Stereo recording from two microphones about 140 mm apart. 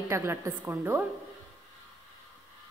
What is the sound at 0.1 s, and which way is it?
Speech, 20° right (ahead or behind).